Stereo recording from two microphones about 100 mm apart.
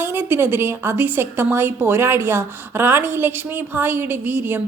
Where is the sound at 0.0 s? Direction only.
20° right (ahead or behind).